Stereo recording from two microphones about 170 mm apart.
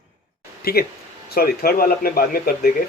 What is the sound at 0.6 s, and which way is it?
A man's voice, 65° left (ahead or behind).